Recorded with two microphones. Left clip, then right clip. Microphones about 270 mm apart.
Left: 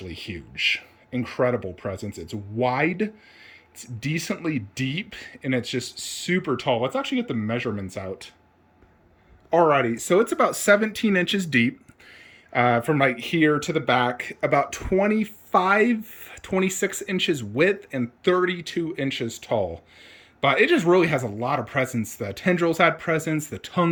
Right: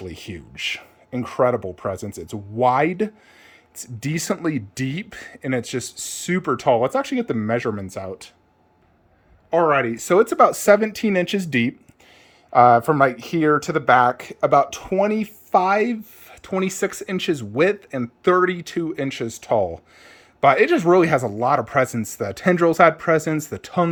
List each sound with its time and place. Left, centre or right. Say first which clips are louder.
0.0 s speech: right 1 dB; centre
9.5 s speech: right 1 dB; centre
13.0 s speech: right 4 dB; right
13.4 s speech: right 4 dB; centre